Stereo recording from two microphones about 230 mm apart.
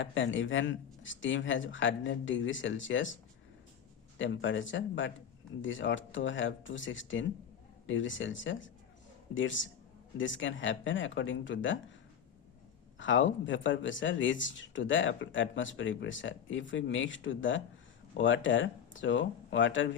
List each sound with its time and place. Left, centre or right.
0.0 s speech: left
4.2 s speech: left
13.0 s speech: left